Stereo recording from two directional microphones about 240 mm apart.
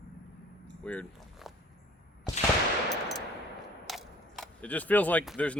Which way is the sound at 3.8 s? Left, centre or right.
Centre.